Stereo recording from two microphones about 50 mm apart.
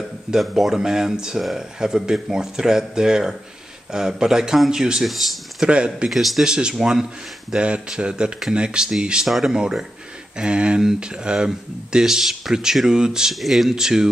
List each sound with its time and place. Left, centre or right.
0.4 s speech: centre
5.0 s speech: centre
5.6 s speech: centre
6.0 s speech: centre
6.4 s speech: centre
9.3 s speech: centre
9.6 s speech: centre
13.3 s speech: centre